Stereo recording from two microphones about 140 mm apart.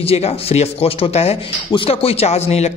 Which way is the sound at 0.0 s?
45° left (ahead or behind).